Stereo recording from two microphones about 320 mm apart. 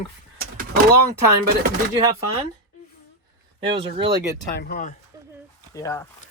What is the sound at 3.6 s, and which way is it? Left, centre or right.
Speech, centre.